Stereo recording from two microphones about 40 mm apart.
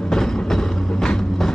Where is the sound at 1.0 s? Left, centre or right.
Centre.